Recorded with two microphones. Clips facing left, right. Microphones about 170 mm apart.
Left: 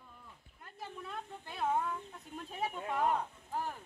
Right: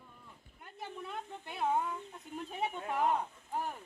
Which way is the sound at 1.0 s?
20° right (ahead or behind).